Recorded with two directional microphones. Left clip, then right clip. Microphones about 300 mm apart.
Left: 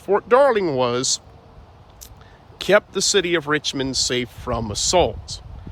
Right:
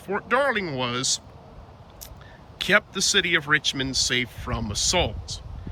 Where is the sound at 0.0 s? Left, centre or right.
Centre.